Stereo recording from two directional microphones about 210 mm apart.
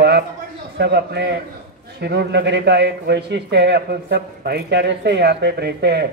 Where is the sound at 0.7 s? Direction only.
50° right (ahead or behind).